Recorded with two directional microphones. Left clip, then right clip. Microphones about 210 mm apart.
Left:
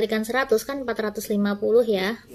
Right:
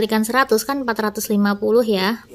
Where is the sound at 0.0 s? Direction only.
35° right (ahead or behind).